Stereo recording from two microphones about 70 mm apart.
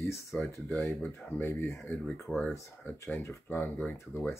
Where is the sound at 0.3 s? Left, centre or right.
Centre.